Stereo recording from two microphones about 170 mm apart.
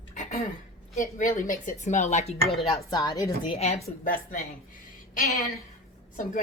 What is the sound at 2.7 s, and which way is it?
Speech, 25° left (ahead or behind).